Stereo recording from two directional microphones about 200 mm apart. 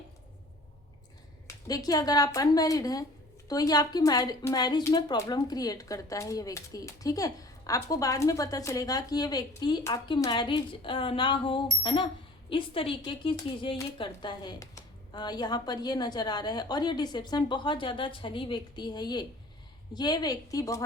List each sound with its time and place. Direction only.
1.6 s a woman's voice: 20° left (ahead or behind)